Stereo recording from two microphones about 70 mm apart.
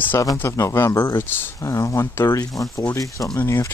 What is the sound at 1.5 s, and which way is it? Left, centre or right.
Speech, left.